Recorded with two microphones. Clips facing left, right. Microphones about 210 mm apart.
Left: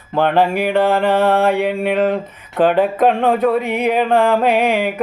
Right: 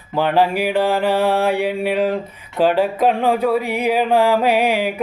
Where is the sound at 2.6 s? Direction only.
50° left (ahead or behind).